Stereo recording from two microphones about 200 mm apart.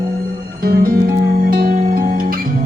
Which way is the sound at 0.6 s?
50° right (ahead or behind).